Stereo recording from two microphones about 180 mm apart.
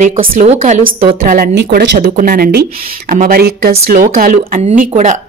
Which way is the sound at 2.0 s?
50° right (ahead or behind).